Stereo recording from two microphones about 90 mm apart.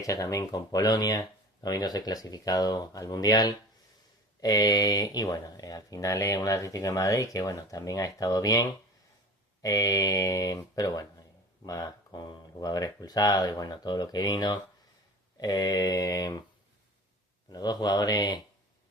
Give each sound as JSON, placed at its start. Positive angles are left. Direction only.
{"t": 0.0, "sound": "speech", "side_deg": 40}
{"t": 17.5, "sound": "speech", "side_deg": 50}